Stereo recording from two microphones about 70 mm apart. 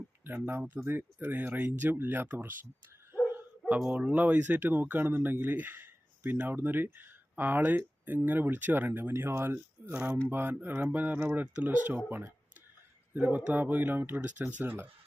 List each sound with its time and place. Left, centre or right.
0.3 s speech: right
3.1 s dog: right
4.2 s speech: right
14.4 s speech: right